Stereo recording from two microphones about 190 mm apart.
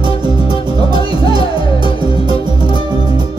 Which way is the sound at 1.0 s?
30° left (ahead or behind).